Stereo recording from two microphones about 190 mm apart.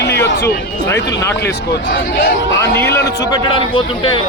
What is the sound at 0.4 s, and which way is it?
Speech, 15° left (ahead or behind).